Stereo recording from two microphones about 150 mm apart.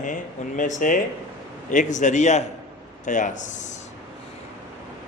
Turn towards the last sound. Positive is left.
turn(degrees=55)  # may be behind; listen again after turning